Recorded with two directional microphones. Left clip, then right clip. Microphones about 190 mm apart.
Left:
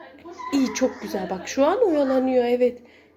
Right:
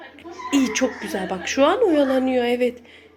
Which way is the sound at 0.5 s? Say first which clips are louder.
Right 2 dB; 5° left (ahead or behind).